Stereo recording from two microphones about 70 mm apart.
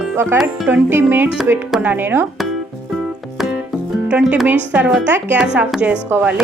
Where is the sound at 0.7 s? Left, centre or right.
Right.